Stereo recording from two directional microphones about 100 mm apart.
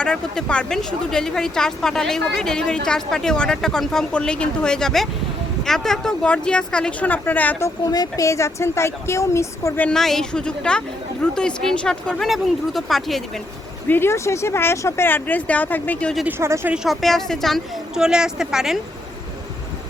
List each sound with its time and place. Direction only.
0.0 s speech: 10° left (ahead or behind)
7.9 s speech: 40° left (ahead or behind)
9.9 s speech: 5° left (ahead or behind)
13.8 s speech: 20° left (ahead or behind)
16.6 s speech: 5° right (ahead or behind)